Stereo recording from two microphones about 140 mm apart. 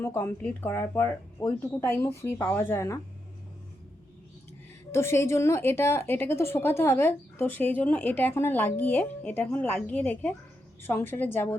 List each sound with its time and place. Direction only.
0.0 s a woman's voice: 15° left (ahead or behind)
4.9 s a woman's voice: 20° left (ahead or behind)